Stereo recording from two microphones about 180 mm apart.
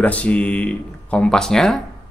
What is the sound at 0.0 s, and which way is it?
Speech, 5° left (ahead or behind).